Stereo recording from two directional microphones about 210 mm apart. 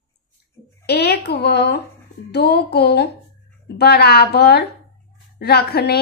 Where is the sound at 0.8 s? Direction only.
50° left (ahead or behind).